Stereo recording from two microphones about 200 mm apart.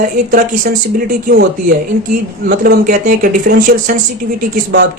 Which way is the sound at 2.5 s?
50° right (ahead or behind).